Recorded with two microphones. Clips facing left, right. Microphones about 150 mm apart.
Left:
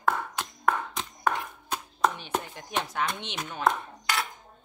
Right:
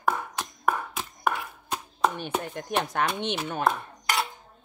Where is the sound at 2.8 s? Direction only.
60° right (ahead or behind).